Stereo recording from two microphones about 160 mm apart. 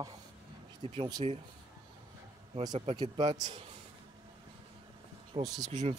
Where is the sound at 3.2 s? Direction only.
25° right (ahead or behind).